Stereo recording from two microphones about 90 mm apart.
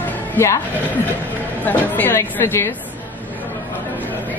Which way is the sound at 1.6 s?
20° left (ahead or behind).